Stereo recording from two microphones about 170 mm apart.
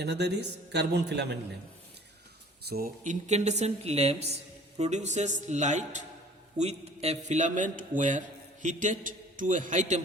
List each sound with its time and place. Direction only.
0.0 s a man's voice: 80° right
2.6 s a man's voice: 60° right (ahead or behind)